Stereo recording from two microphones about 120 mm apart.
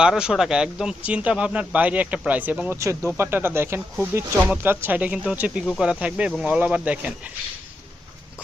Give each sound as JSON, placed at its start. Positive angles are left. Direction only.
{"t": 0.0, "sound": "speech", "side_deg": -5}
{"t": 2.7, "sound": "speech", "side_deg": -25}